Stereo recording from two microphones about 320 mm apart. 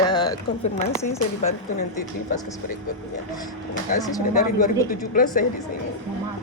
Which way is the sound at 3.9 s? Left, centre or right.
Left.